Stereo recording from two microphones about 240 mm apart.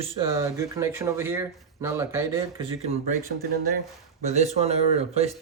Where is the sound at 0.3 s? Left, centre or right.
Centre.